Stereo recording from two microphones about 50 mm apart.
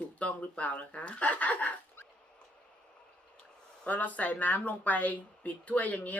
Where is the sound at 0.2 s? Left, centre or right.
Left.